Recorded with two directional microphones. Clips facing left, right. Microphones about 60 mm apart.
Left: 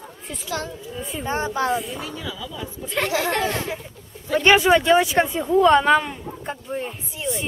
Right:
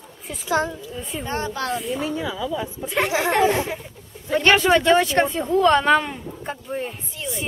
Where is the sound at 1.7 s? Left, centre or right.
Centre.